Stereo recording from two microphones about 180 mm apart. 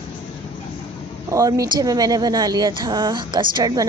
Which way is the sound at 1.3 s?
20° right (ahead or behind).